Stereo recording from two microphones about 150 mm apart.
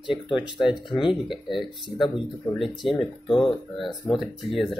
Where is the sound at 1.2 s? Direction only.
Centre (ahead or behind).